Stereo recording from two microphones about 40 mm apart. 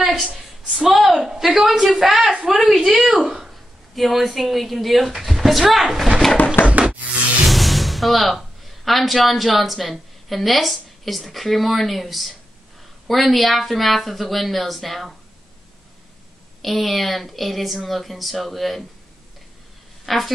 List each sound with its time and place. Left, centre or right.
0.0 s a sound: centre
0.7 s a woman's voice: centre
6.6 s a sound: left
7.4 s speech: centre
16.6 s speech: centre
20.1 s speech: centre